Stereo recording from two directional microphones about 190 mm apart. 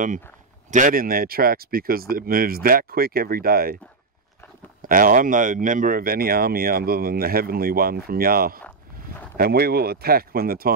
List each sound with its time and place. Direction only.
0.7 s speech: 45° right (ahead or behind)
4.8 s speech: 45° right (ahead or behind)